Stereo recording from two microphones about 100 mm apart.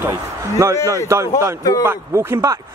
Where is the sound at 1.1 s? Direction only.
30° right (ahead or behind).